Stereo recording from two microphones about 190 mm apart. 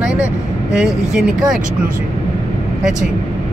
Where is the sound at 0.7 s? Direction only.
5° right (ahead or behind).